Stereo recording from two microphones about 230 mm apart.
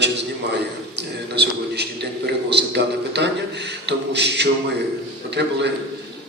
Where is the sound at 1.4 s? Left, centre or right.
Right.